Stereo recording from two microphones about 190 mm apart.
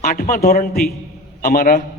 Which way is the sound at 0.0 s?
50° left (ahead or behind).